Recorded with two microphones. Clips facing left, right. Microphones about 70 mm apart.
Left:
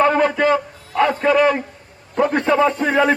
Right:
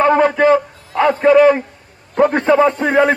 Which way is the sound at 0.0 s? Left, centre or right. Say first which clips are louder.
Right 4 dB; right.